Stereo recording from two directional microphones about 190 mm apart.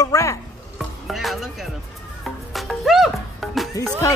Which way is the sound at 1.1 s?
Centre (ahead or behind).